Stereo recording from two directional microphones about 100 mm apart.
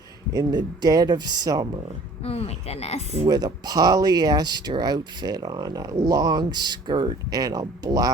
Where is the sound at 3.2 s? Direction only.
40° right (ahead or behind).